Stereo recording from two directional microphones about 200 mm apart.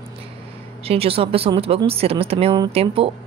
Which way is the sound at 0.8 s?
30° right (ahead or behind).